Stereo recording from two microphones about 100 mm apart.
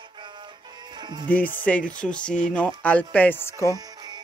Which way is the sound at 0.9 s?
45° right (ahead or behind).